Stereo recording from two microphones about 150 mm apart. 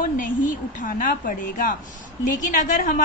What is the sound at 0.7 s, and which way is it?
A woman's voice, 60° left (ahead or behind).